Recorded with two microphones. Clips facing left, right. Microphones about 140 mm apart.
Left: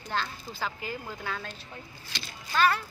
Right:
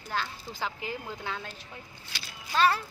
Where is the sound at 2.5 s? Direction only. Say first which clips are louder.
Even; 30° right (ahead or behind).